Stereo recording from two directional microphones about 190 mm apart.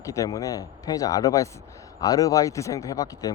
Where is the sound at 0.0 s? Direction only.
15° left (ahead or behind).